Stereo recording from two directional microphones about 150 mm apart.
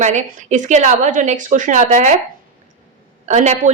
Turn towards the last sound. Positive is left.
turn(degrees=-50)  # may be behind; listen again after turning